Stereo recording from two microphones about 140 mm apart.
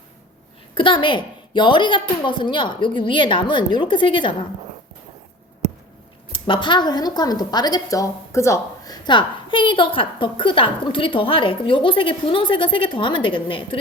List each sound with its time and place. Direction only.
0.7 s a woman's voice: 35° left (ahead or behind)
6.3 s a woman's voice: 35° left (ahead or behind)